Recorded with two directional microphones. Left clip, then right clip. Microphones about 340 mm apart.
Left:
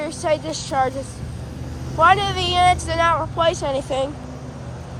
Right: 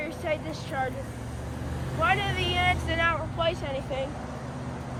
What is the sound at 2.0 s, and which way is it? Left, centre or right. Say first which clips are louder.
Speech: left 10 dB; centre.